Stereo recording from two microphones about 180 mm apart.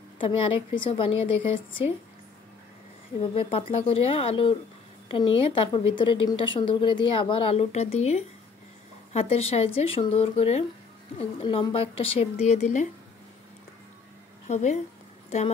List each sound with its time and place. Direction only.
0.2 s a woman's voice: 30° left (ahead or behind)
3.2 s a woman's voice: 30° left (ahead or behind)
14.5 s a woman's voice: 40° left (ahead or behind)